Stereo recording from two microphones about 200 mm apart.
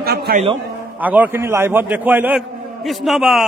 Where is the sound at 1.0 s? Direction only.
10° right (ahead or behind).